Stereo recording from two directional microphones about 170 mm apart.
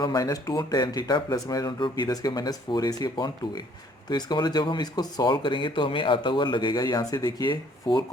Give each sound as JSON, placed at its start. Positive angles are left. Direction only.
{"t": 0.0, "sound": "speech", "side_deg": 25}